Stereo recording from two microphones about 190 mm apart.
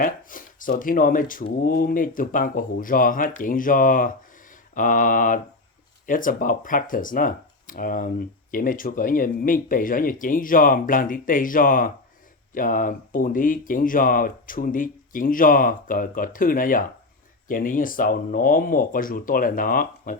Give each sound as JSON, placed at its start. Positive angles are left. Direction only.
{"t": 0.0, "sound": "speech", "side_deg": 45}